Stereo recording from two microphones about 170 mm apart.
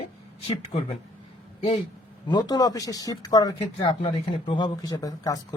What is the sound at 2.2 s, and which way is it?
Speech, 25° left (ahead or behind).